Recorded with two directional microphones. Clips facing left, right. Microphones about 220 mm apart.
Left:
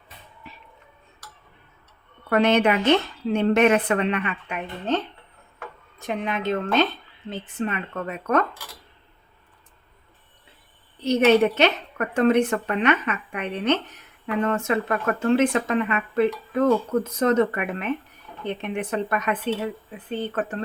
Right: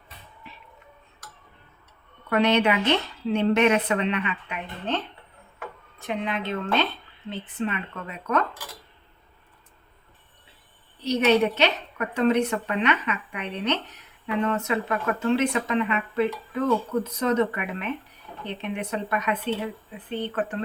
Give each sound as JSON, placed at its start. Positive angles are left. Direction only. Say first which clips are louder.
{"t": 2.3, "sound": "speech", "louder": "left 2 dB", "side_deg": 50}
{"t": 6.0, "sound": "speech", "louder": "left 2 dB", "side_deg": 45}
{"t": 11.0, "sound": "speech", "louder": "left 3 dB", "side_deg": 50}